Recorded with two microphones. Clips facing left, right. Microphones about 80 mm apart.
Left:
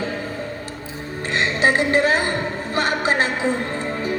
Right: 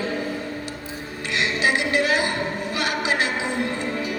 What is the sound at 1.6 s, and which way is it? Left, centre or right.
Speech, left.